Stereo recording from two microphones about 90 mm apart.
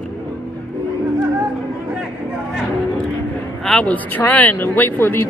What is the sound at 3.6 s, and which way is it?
Speech, 10° left (ahead or behind).